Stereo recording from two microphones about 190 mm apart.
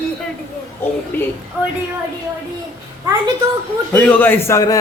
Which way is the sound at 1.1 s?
10° left (ahead or behind).